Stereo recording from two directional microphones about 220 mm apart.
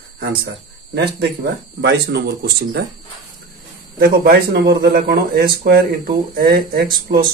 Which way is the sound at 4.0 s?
45° right (ahead or behind).